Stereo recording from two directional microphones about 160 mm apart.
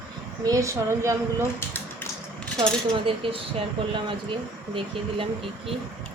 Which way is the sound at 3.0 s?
35° right (ahead or behind).